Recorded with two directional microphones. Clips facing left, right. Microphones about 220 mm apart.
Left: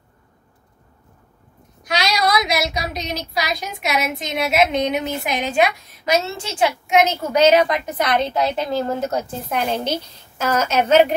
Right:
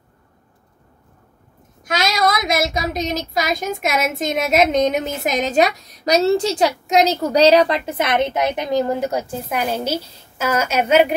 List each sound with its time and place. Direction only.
1.8 s speech: 45° right (ahead or behind); by 11.1 s 10° right (ahead or behind)